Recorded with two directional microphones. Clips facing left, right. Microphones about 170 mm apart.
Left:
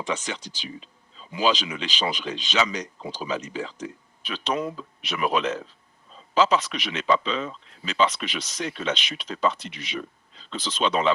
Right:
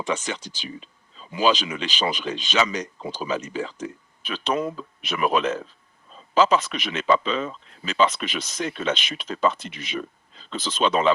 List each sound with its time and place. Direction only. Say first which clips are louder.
0.0 s speech: right 2 dB; 50° right (ahead or behind)